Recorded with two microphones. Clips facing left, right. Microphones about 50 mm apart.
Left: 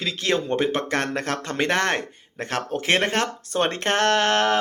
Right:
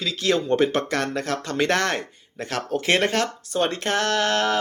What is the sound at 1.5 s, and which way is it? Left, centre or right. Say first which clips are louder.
Speech: even; left.